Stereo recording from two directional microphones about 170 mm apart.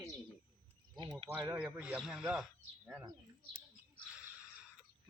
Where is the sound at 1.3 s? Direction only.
10° right (ahead or behind).